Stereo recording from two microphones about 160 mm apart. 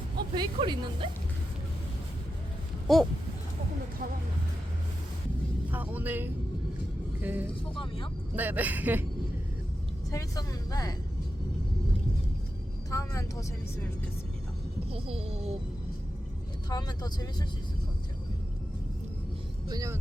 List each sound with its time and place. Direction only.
0.3 s speech: 30° right (ahead or behind)
2.8 s a sound: centre (ahead or behind)
5.7 s speech: 10° right (ahead or behind)
7.8 s speech: 30° left (ahead or behind)
8.4 s speech: 10° right (ahead or behind)
10.1 s speech: 20° left (ahead or behind)
12.9 s speech: 20° left (ahead or behind)
14.8 s speech: 35° right (ahead or behind)
16.6 s speech: 25° left (ahead or behind)
19.6 s speech: 20° right (ahead or behind)